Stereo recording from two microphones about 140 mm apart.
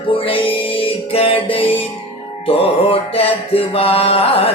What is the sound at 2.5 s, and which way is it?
Mantra, 45° left (ahead or behind).